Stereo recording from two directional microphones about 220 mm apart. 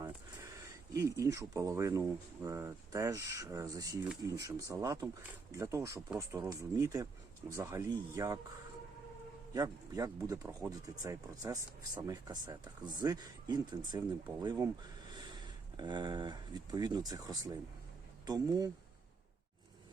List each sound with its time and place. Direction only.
0.9 s speech: 15° right (ahead or behind)
9.5 s speech: 15° right (ahead or behind)